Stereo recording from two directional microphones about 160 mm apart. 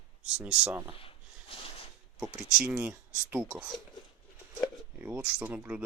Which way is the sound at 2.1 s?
5° right (ahead or behind).